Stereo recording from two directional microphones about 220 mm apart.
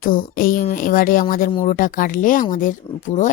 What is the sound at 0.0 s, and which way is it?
Speech, 40° left (ahead or behind).